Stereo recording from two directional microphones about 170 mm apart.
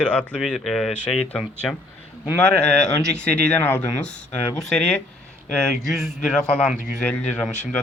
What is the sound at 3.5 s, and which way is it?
Speech, 10° left (ahead or behind).